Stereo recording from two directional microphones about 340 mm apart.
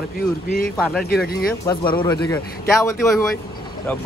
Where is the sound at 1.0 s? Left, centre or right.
Left.